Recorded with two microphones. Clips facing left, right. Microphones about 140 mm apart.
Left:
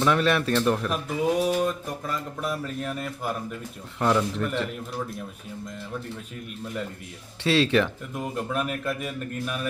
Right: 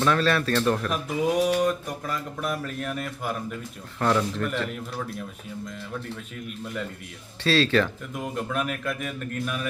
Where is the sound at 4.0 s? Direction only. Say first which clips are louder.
Even; 15° left (ahead or behind).